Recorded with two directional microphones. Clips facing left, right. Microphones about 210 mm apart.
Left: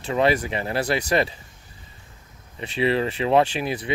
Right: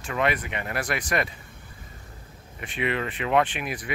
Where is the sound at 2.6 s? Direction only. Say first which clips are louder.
Left 6 dB; 30° left (ahead or behind).